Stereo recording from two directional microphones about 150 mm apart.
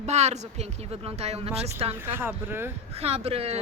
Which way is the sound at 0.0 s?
50° right (ahead or behind).